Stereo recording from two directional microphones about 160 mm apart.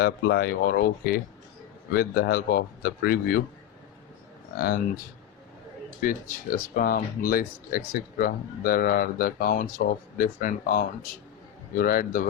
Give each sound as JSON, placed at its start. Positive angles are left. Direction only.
{"t": 0.0, "sound": "speech", "side_deg": 75}
{"t": 4.5, "sound": "speech", "side_deg": 70}
{"t": 6.0, "sound": "speech", "side_deg": 60}